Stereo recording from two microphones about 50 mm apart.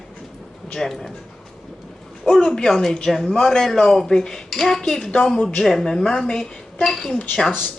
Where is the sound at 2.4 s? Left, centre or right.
Centre.